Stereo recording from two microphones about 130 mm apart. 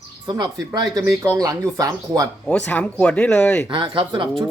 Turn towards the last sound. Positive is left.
turn(degrees=-35)  # may be behind; listen again after turning